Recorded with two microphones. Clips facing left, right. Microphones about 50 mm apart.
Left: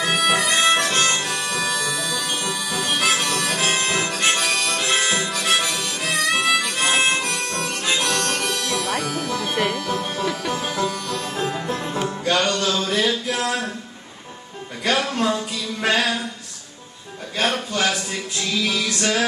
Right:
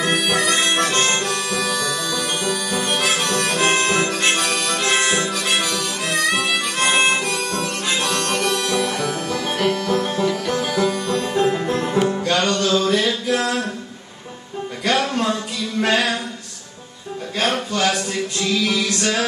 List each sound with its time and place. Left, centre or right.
0.0 s music: centre
0.7 s harmonica: centre
1.7 s music: centre
2.9 s harmonica: centre
8.3 s music: centre
11.1 s music: centre
12.3 s a sound: centre
14.9 s a sound: centre
17.4 s a sound: centre
18.5 s music: centre